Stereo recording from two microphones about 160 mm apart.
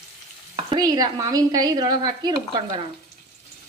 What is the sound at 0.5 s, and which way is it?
Speech, 30° right (ahead or behind).